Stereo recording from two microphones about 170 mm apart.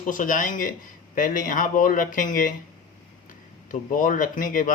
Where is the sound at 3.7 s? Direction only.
50° left (ahead or behind).